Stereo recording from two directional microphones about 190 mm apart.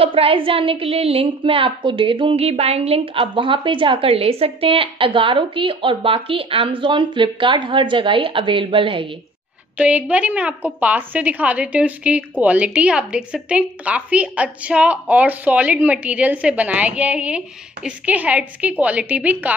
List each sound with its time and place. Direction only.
0.0 s a woman's voice: 30° right (ahead or behind)
9.8 s a woman's voice: 5° right (ahead or behind)